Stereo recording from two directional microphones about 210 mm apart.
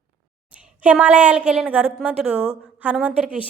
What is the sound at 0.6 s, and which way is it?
A woman's voice, 5° right (ahead or behind).